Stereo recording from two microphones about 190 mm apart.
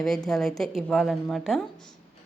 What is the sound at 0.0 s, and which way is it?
A woman's voice, centre (ahead or behind).